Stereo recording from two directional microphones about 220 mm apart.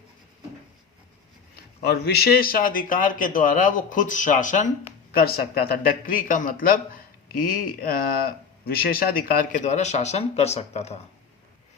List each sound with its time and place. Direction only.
1.5 s a man's voice: 45° left (ahead or behind); by 11.0 s 30° left (ahead or behind)